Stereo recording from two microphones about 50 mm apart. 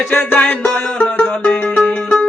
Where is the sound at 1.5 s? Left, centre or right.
Left.